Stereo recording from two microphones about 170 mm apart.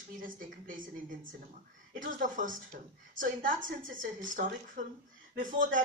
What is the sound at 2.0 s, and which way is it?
Speech, 50° right (ahead or behind).